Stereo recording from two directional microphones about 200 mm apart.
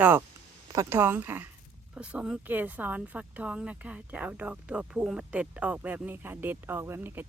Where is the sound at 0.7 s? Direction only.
15° right (ahead or behind).